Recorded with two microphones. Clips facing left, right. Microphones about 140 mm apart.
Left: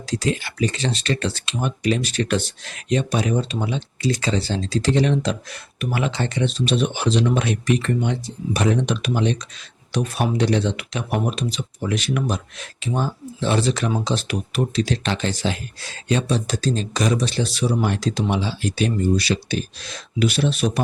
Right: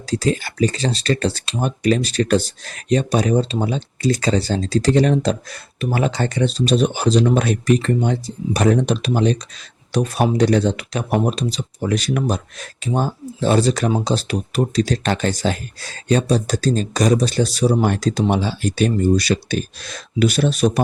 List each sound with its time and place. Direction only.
0.1 s speech: 35° right (ahead or behind)